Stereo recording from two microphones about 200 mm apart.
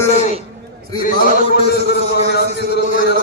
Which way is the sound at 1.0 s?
50° left (ahead or behind).